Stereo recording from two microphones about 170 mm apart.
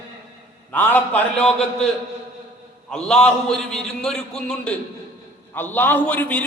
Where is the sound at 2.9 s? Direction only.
5° left (ahead or behind).